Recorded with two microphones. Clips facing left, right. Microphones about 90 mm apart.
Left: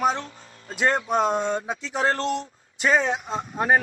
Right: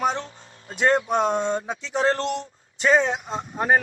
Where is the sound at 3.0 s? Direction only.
5° left (ahead or behind).